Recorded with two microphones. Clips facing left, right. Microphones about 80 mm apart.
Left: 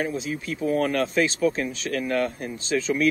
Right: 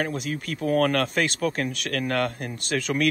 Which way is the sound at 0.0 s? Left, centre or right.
Right.